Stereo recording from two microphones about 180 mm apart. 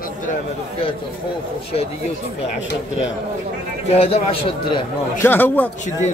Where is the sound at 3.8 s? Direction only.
30° left (ahead or behind).